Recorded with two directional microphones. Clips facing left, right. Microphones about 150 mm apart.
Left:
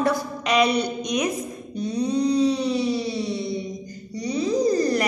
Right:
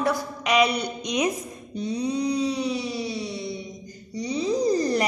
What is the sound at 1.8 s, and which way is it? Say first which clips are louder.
A woman's voice: left 3 dB; 20° right (ahead or behind).